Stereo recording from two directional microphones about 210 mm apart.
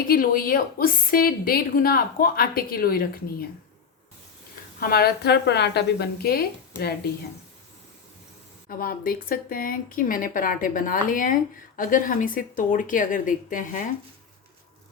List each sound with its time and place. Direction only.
0.1 s a woman's voice: 45° left (ahead or behind)
4.8 s a woman's voice: 45° left (ahead or behind)
8.8 s speech: 40° left (ahead or behind)